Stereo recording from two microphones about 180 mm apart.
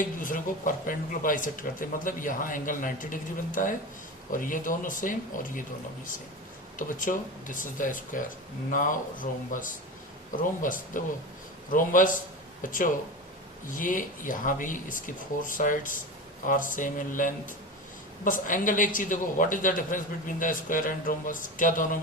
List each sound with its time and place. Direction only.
0.2 s speech: 50° left (ahead or behind)
6.7 s speech: 45° left (ahead or behind)